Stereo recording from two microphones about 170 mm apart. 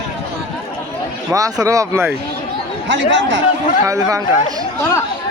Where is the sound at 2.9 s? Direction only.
90° right.